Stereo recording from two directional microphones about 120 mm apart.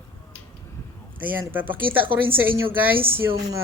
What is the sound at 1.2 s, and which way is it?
Speech, 15° right (ahead or behind).